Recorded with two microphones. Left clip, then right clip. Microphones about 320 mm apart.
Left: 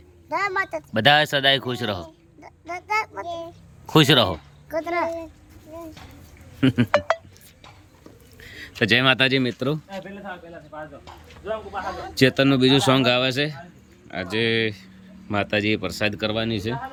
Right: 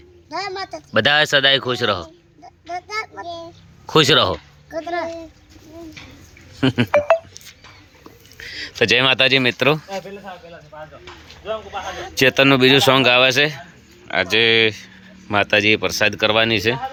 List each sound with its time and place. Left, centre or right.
0.3 s a woman's voice: centre
0.9 s speech: centre
2.4 s a sound: centre
3.0 s child singing: centre
3.8 s speech: centre
6.6 s speech: centre
8.4 s a sound: centre
8.8 s speech: centre
10.7 s a sound: right
11.5 s speech: right
12.1 s speech: centre